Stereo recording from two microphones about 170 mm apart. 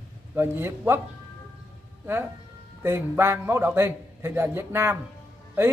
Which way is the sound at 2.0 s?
10° right (ahead or behind).